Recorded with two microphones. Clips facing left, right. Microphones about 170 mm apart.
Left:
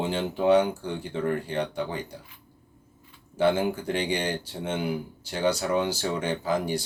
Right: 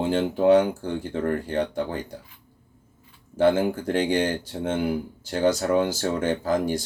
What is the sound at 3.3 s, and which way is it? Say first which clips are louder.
Speech: right 3 dB; 50° right (ahead or behind).